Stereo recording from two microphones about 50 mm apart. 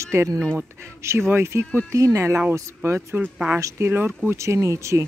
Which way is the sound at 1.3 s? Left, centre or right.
Right.